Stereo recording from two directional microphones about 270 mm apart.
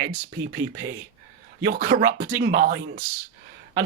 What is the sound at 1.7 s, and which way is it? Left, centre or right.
Speech, right.